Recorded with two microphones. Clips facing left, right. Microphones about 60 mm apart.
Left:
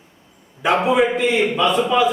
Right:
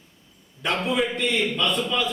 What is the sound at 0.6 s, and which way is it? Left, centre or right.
A man's voice, centre.